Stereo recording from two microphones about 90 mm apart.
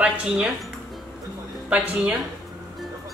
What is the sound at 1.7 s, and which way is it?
Speech, 15° right (ahead or behind).